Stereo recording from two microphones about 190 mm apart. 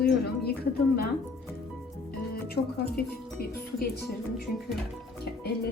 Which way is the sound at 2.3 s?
55° left (ahead or behind).